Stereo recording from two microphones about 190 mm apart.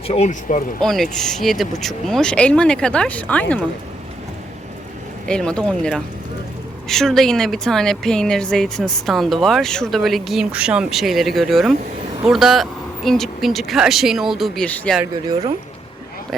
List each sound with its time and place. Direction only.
0.1 s speech: 40° left (ahead or behind)
0.8 s speech: centre (ahead or behind)
5.3 s speech: 5° left (ahead or behind)